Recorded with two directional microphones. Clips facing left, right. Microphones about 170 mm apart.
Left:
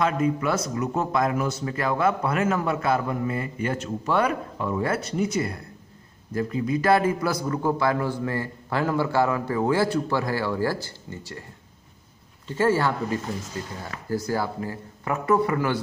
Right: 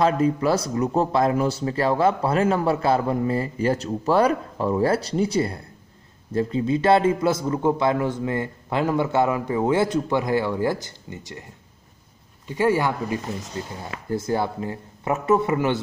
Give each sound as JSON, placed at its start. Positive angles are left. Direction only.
{"t": 0.0, "sound": "a man's voice", "side_deg": -35}
{"t": 12.4, "sound": "a man's voice", "side_deg": -15}